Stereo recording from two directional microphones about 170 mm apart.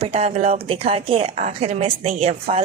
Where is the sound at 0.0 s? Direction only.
40° right (ahead or behind).